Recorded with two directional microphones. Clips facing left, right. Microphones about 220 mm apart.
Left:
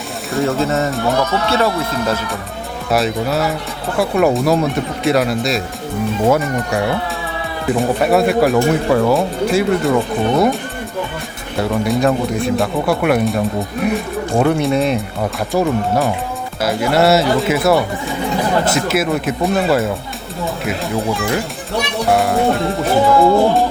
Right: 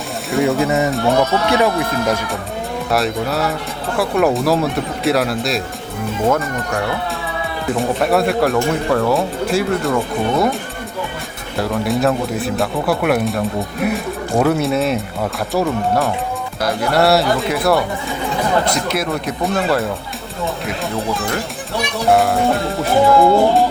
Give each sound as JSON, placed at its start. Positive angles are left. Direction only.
{"t": 0.3, "sound": "speech", "side_deg": 0}
{"t": 0.6, "sound": "speech", "side_deg": -15}
{"t": 0.9, "sound": "speech", "side_deg": 0}
{"t": 1.5, "sound": "speech", "side_deg": -15}
{"t": 2.9, "sound": "speech", "side_deg": 0}
{"t": 11.5, "sound": "speech", "side_deg": 0}
{"t": 20.9, "sound": "speech", "side_deg": 0}